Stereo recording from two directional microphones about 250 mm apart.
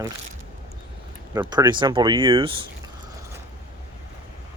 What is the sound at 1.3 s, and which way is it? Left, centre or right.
Speech, centre.